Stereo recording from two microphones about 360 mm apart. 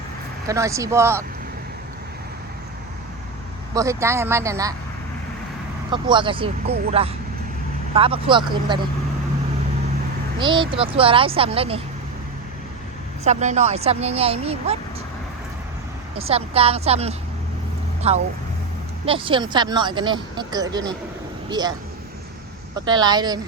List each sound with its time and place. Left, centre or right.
0.4 s speech: centre
3.8 s speech: centre
5.9 s speech: centre
10.3 s speech: centre
13.2 s speech: centre
16.1 s speech: centre